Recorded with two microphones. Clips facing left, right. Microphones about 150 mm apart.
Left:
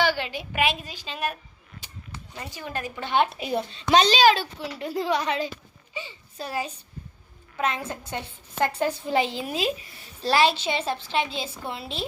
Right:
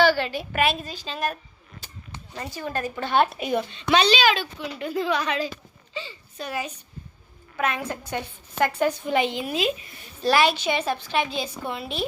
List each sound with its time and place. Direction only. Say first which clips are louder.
0.0 s a woman's voice: right 5 dB; 15° left (ahead or behind)
2.5 s a woman's voice: right 4 dB; 10° left (ahead or behind)
3.4 s a child's voice: right 2 dB; 35° left (ahead or behind)
5.9 s speech: right 2 dB; 15° left (ahead or behind)
6.3 s a child's voice: even; 35° left (ahead or behind)